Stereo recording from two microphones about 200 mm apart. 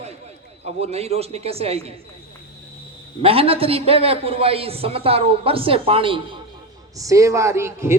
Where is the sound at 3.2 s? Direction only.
30° right (ahead or behind); by 7.9 s 15° right (ahead or behind).